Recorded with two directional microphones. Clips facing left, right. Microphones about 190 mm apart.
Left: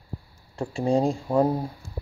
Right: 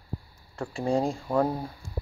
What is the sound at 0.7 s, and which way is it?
Speech, 25° left (ahead or behind).